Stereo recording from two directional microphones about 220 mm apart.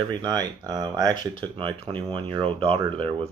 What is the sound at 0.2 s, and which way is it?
Speech, 20° right (ahead or behind).